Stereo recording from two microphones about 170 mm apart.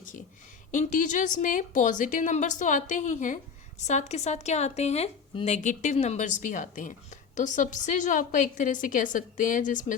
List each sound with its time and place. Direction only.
0.0 s a sound: 50° left (ahead or behind)
0.7 s a woman's voice: 50° left (ahead or behind)
5.6 s a woman's voice: 45° left (ahead or behind)